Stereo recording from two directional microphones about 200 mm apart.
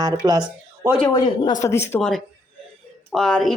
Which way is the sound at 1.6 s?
15° left (ahead or behind).